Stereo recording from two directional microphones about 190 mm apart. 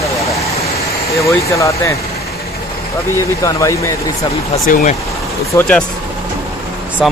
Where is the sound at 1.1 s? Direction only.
15° left (ahead or behind).